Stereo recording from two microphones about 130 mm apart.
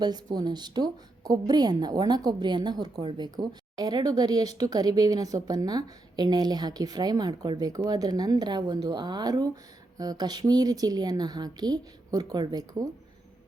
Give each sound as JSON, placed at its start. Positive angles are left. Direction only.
{"t": 0.0, "sound": "a woman's voice", "side_deg": -30}